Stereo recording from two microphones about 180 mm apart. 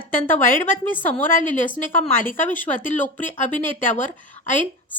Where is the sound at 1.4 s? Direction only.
45° left (ahead or behind).